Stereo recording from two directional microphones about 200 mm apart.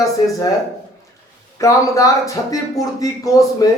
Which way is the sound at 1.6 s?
15° left (ahead or behind).